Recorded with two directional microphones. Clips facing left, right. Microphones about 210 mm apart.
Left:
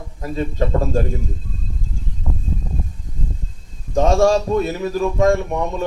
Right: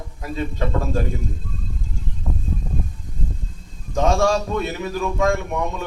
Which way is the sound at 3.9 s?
35° left (ahead or behind).